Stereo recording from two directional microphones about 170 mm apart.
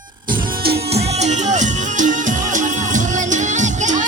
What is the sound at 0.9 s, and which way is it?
Music, 40° right (ahead or behind).